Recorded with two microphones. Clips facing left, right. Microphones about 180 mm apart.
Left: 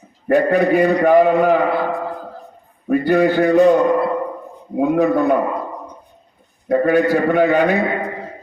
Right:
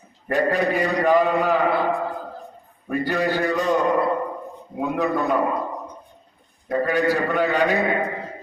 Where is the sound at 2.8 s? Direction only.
55° left (ahead or behind).